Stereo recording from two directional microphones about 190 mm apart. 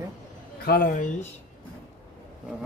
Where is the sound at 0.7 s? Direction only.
50° left (ahead or behind).